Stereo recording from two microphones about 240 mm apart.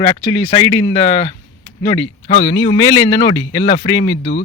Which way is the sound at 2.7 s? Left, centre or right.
Left.